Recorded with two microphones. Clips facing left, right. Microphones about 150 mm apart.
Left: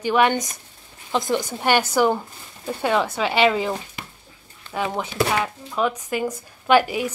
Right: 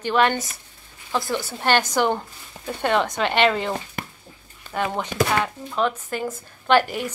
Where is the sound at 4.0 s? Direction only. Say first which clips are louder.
Right 5 dB; 50° right (ahead or behind).